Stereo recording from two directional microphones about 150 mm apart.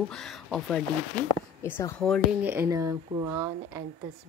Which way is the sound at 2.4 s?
15° right (ahead or behind).